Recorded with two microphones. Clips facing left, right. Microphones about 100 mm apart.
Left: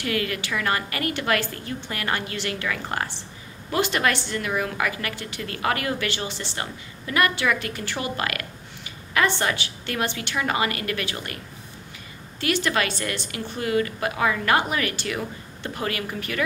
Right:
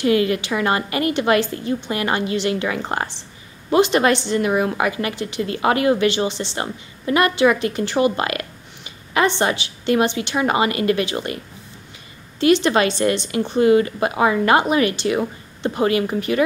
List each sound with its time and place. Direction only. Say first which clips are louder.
0.0 s a woman's voice: right 9 dB; 25° right (ahead or behind)
12.4 s a woman's voice: right 8 dB; 25° right (ahead or behind)